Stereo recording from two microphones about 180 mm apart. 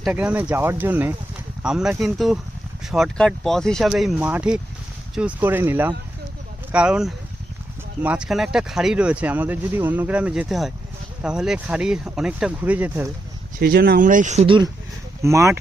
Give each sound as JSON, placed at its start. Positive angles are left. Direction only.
{"t": 0.0, "sound": "speech", "side_deg": -5}
{"t": 13.6, "sound": "speech", "side_deg": -60}
{"t": 14.4, "sound": "speech", "side_deg": -25}
{"t": 15.2, "sound": "speech", "side_deg": -15}